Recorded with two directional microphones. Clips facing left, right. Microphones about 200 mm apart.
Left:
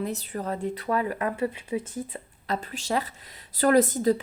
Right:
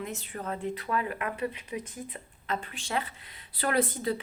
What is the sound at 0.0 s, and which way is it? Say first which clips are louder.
Speech: left 6 dB; 35° left (ahead or behind).